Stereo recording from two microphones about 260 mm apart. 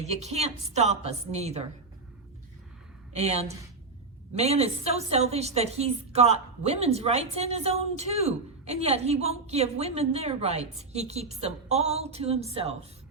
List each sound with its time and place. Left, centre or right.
0.0 s a woman's voice: right
3.1 s a woman's voice: right